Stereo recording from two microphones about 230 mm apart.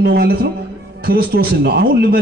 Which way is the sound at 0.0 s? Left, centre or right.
Right.